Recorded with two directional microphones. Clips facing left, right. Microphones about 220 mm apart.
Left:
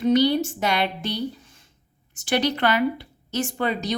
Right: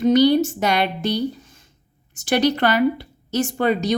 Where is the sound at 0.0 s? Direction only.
45° right (ahead or behind).